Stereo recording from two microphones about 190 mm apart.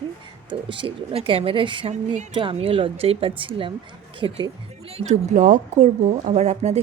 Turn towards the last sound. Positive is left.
turn(degrees=-35)  # may be behind; listen again after turning